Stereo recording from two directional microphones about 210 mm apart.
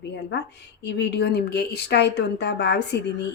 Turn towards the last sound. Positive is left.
turn(degrees=55)  # may be behind; listen again after turning